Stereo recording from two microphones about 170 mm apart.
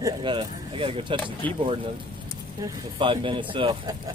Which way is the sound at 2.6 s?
30° right (ahead or behind).